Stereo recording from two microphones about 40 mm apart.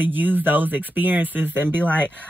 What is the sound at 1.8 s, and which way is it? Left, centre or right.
Speech, left.